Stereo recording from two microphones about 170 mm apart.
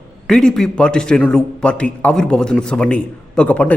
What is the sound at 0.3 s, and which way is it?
A man's voice, 5° left (ahead or behind).